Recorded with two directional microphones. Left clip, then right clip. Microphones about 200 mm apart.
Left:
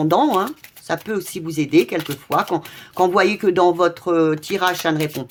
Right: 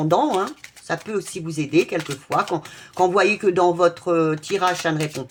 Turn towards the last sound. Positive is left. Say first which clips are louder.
# left 2 dB
turn(degrees=30)  # may be behind; listen again after turning